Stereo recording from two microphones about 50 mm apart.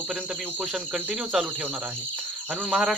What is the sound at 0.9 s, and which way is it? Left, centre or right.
Speech, centre.